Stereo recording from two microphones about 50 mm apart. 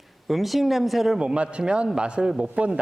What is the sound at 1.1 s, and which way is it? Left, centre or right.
A man's voice, right.